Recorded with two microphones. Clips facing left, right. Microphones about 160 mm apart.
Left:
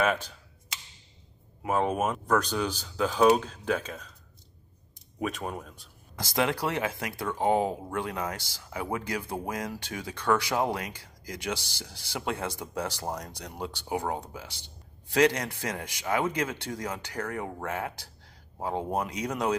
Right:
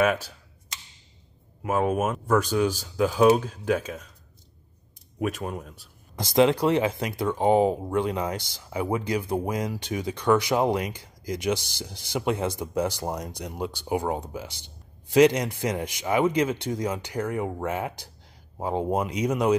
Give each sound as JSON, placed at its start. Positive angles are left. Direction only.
{"t": 0.0, "sound": "speech", "side_deg": -10}
{"t": 1.6, "sound": "speech", "side_deg": -5}
{"t": 5.2, "sound": "speech", "side_deg": 0}
{"t": 6.1, "sound": "speech", "side_deg": -20}